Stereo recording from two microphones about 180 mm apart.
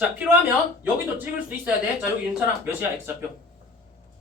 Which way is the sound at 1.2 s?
10° right (ahead or behind).